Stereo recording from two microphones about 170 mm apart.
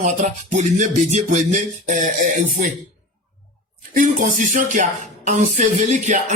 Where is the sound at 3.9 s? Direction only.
50° right (ahead or behind).